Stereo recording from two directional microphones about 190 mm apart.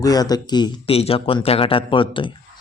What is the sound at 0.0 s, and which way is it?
Speech, 20° left (ahead or behind).